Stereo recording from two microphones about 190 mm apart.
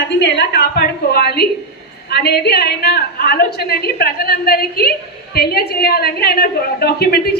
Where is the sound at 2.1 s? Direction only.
60° left (ahead or behind).